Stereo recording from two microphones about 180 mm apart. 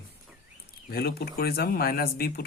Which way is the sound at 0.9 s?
60° left (ahead or behind).